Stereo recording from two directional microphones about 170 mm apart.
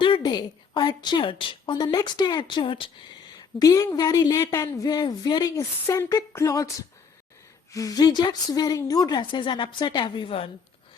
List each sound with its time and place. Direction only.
0.0 s speech: 25° left (ahead or behind)
7.7 s speech: 20° left (ahead or behind)